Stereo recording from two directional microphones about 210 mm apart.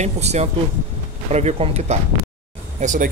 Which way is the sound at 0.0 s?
30° right (ahead or behind).